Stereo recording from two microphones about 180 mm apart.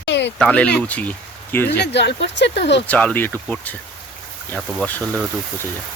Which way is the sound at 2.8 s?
5° left (ahead or behind).